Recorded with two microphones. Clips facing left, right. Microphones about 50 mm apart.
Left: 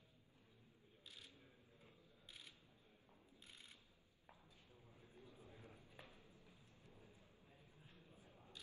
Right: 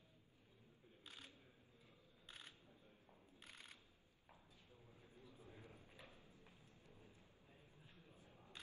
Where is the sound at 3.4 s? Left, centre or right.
Right.